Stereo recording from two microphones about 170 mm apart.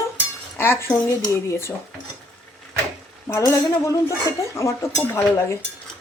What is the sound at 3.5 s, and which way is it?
Speech, 15° left (ahead or behind).